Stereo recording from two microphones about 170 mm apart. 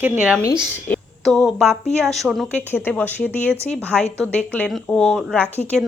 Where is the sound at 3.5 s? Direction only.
40° left (ahead or behind).